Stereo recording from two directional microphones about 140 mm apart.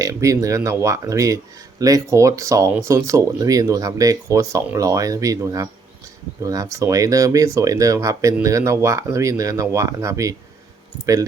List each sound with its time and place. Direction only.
0.0 s speech: 20° right (ahead or behind)